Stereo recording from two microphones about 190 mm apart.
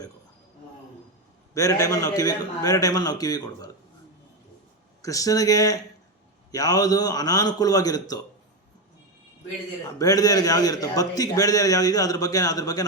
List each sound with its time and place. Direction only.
1.5 s a man's voice: 15° left (ahead or behind)
5.0 s a man's voice: 20° left (ahead or behind)
10.0 s a man's voice: 20° left (ahead or behind)